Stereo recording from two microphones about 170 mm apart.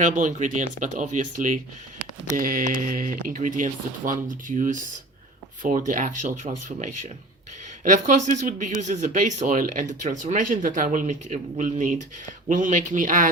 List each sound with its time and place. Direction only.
0.0 s speech: 45° right (ahead or behind)
5.9 s speech: 50° right (ahead or behind)